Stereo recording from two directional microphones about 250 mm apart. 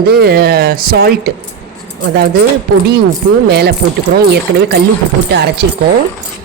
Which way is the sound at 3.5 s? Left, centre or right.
Right.